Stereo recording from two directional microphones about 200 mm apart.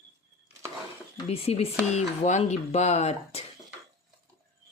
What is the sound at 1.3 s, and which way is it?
Speech, 30° left (ahead or behind).